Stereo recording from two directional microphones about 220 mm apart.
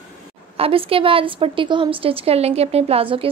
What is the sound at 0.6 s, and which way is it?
A woman's voice, 25° right (ahead or behind).